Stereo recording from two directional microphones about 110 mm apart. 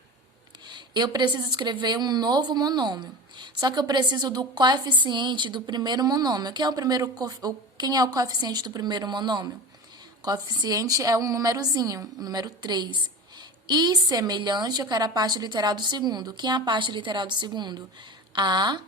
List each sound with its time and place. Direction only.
0.7 s speech: 40° right (ahead or behind)